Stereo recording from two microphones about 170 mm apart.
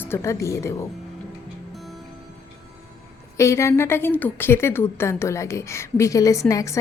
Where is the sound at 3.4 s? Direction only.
15° left (ahead or behind).